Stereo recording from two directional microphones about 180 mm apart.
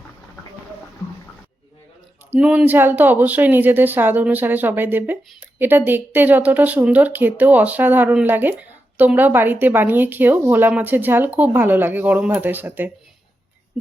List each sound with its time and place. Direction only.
2.3 s a woman's voice: 5° right (ahead or behind)